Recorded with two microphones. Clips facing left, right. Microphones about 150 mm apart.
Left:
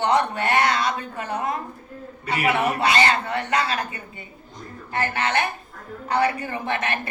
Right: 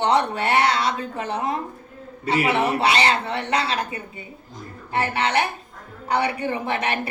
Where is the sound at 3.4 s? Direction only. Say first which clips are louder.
Even; 30° right (ahead or behind).